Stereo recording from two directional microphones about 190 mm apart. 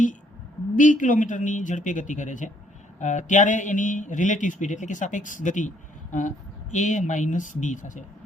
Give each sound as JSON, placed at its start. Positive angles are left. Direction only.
{"t": 0.8, "sound": "a man's voice", "side_deg": 45}